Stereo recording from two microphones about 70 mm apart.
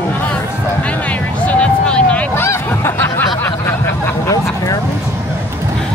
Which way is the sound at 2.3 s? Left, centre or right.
Left.